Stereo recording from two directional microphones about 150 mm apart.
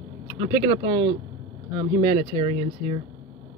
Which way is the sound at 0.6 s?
30° right (ahead or behind).